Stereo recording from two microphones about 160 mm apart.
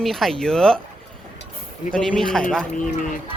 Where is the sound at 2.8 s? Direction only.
55° left (ahead or behind).